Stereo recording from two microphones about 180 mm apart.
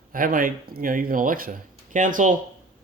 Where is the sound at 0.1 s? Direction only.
50° right (ahead or behind).